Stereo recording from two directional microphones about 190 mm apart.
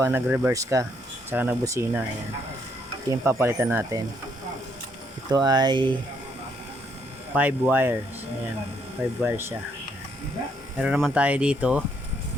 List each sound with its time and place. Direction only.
0.0 s speech: 10° right (ahead or behind)
3.1 s speech: 15° right (ahead or behind)
5.3 s speech: 20° right (ahead or behind)
7.3 s speech: 10° right (ahead or behind)
9.2 s speech: 10° right (ahead or behind)
10.8 s speech: centre (ahead or behind)